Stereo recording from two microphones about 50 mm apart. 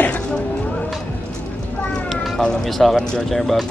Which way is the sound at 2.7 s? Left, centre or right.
Centre.